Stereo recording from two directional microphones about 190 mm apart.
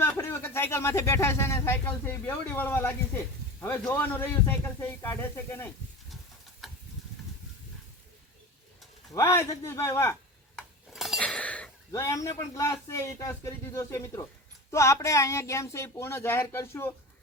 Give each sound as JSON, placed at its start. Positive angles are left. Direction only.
{"t": 0.0, "sound": "speech", "side_deg": 15}
{"t": 9.1, "sound": "speech", "side_deg": 15}
{"t": 10.6, "sound": "dishes", "side_deg": 0}
{"t": 11.9, "sound": "speech", "side_deg": 15}